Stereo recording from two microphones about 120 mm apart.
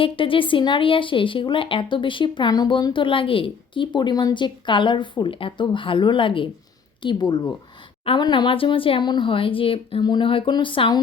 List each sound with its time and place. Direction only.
0.0 s speech: 45° left (ahead or behind)